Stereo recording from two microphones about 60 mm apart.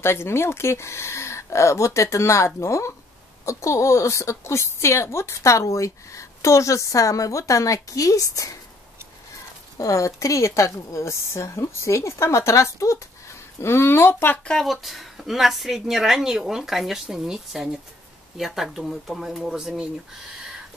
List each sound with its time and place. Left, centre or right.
0.0 s a woman's voice: left
9.8 s a woman's voice: left
13.6 s speech: left
14.4 s speech: centre
14.7 s speech: centre